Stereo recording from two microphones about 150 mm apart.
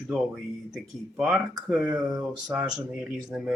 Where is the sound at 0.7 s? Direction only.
Centre (ahead or behind).